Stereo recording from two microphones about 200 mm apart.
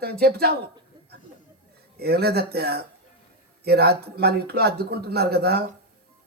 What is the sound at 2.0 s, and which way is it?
A woman's voice, 55° right (ahead or behind).